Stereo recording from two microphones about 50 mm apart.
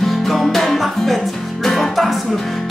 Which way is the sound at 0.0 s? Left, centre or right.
Centre.